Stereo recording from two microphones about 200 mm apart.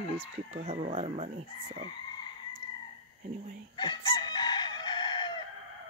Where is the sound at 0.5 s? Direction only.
35° right (ahead or behind).